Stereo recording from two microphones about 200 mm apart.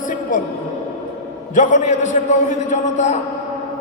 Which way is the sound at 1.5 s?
40° left (ahead or behind).